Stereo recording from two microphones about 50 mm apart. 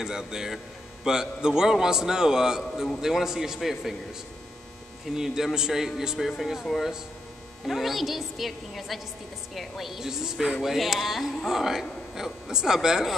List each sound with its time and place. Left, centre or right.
0.0 s a man's voice: centre
5.0 s a man's voice: centre